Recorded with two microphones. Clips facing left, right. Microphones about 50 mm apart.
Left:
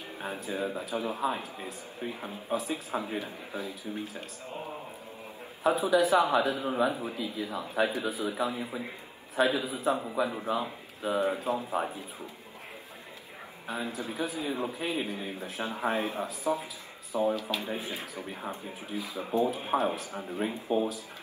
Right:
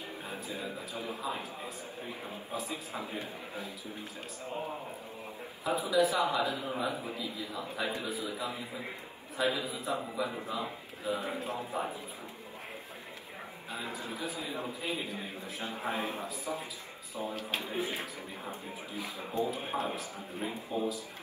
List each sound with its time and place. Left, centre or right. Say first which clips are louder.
0.2 s a man's voice: left 8 dB; left
5.6 s a man's voice: left 4 dB; left
6.8 s a man's voice: left 6 dB; left
7.2 s a man's voice: left 4 dB; left
13.9 s a man's voice: left 4 dB; left
17.7 s speech: right 2 dB; right
18.1 s a man's voice: left 4 dB; left